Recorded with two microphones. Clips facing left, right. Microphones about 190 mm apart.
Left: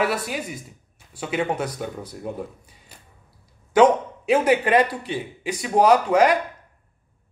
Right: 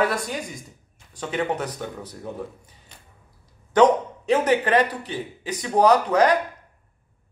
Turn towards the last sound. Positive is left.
turn(degrees=10)  # may be behind; listen again after turning